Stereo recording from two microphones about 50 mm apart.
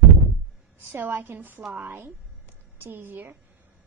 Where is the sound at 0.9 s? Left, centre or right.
Right.